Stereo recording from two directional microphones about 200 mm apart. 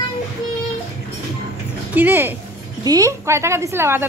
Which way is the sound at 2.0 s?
10° right (ahead or behind).